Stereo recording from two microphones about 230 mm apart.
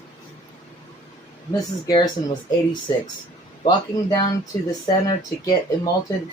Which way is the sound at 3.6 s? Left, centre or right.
Centre.